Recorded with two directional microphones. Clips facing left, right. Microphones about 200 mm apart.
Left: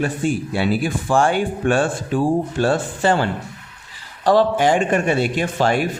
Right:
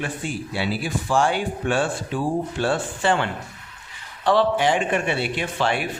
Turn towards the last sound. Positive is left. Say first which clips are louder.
# left 5 dB
turn(degrees=40)  # may be behind; listen again after turning